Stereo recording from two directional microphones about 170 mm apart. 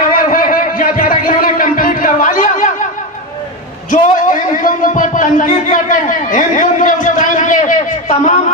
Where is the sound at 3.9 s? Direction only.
50° left (ahead or behind).